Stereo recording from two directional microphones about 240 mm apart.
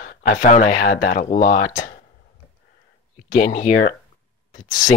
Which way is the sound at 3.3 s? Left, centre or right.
Left.